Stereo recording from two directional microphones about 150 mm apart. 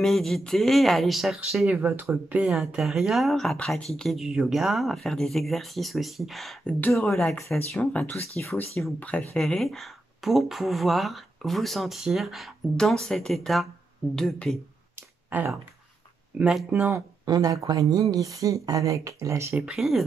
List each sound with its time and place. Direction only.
0.0 s speech: centre (ahead or behind)
1.8 s speech: 15° right (ahead or behind); by 8.2 s 10° left (ahead or behind)
8.4 s speech: 20° left (ahead or behind)
15.2 s speech: 10° right (ahead or behind)
16.9 s speech: 25° right (ahead or behind)
19.6 s speech: centre (ahead or behind)